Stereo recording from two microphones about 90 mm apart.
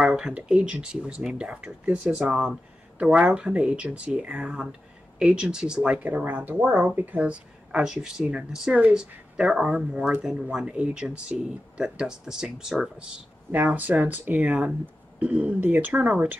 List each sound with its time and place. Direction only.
0.0 s speech: 10° right (ahead or behind)
13.5 s speech: 20° right (ahead or behind)